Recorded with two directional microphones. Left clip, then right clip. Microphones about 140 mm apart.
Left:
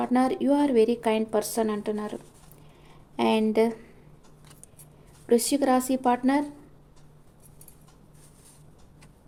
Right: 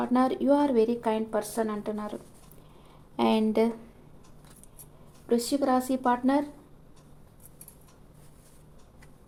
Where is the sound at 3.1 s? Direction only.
5° left (ahead or behind).